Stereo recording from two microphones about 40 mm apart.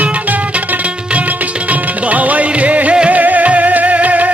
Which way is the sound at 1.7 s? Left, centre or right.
Right.